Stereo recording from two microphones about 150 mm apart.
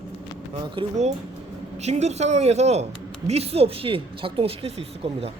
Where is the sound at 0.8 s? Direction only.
35° right (ahead or behind).